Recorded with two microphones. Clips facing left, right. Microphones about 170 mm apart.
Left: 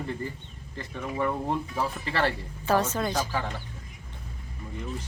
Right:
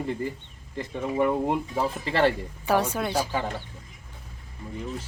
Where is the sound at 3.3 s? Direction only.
20° right (ahead or behind).